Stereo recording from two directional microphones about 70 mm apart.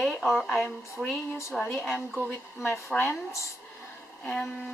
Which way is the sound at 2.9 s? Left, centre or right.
Centre.